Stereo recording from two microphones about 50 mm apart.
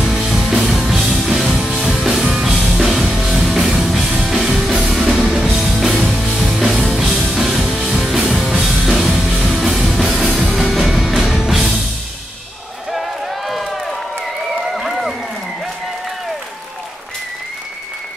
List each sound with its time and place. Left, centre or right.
0.3 s music: centre
12.9 s a sound: centre
14.8 s applause: centre